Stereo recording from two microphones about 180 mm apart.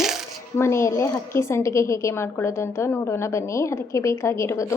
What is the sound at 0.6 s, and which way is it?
A woman's voice, 15° left (ahead or behind).